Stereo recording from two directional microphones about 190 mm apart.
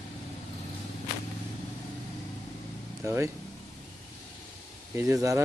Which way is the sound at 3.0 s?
15° right (ahead or behind).